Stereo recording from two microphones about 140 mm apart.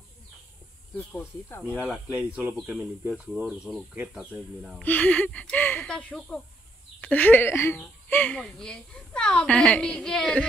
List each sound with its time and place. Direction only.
2.1 s speech: 5° right (ahead or behind)
4.8 s speech: 10° left (ahead or behind)